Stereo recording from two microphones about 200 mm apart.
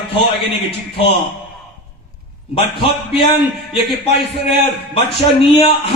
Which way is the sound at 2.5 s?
30° left (ahead or behind).